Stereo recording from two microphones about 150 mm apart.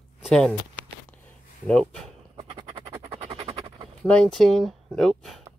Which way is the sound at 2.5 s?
30° right (ahead or behind).